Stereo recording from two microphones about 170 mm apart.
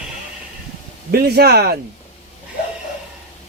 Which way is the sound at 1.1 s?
70° right (ahead or behind).